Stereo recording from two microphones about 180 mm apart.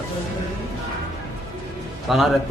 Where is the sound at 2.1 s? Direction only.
Centre (ahead or behind).